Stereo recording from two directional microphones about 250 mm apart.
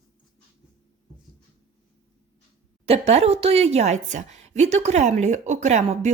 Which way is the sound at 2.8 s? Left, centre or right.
Right.